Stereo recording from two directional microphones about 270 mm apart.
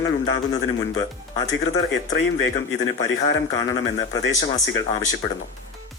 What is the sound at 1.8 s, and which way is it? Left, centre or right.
Speech, left.